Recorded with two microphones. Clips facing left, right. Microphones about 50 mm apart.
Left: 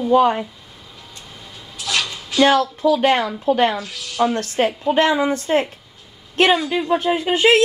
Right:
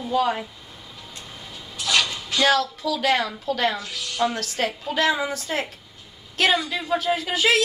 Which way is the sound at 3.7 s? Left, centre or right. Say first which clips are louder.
Left 3 dB; centre.